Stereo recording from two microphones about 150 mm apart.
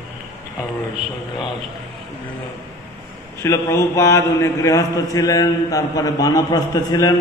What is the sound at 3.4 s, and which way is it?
A man's voice, 20° left (ahead or behind).